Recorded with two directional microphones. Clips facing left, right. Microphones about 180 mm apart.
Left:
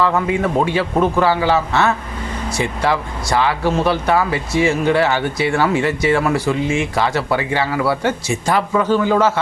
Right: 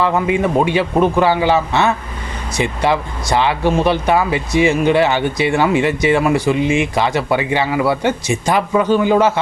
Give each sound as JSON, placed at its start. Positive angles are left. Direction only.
{"t": 0.0, "sound": "speech", "side_deg": -15}